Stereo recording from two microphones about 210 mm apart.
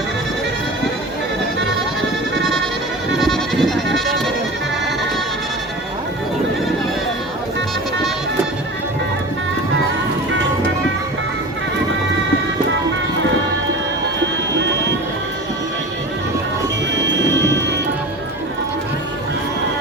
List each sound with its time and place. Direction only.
3.2 s goat: centre (ahead or behind)
14.6 s run: 55° right (ahead or behind)
16.9 s music: 55° right (ahead or behind)